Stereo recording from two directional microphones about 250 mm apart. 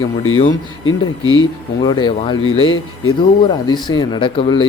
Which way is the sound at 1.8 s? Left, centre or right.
Centre.